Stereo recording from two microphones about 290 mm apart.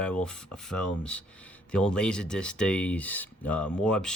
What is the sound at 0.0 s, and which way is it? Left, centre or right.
Speech, centre.